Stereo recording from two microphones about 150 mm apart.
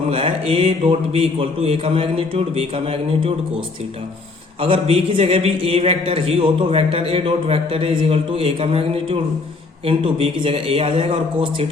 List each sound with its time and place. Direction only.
0.1 s a man's voice: 40° right (ahead or behind)
4.6 s a man's voice: 35° right (ahead or behind)